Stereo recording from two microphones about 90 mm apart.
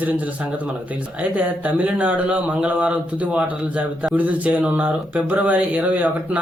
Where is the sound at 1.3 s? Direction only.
15° right (ahead or behind).